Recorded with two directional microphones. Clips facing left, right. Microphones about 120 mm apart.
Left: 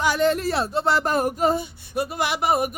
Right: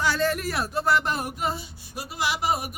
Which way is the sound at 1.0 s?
45° left (ahead or behind).